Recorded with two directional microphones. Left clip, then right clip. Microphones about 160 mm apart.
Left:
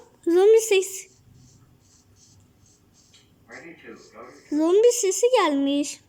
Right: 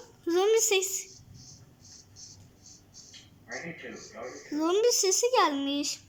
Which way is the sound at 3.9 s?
25° left (ahead or behind).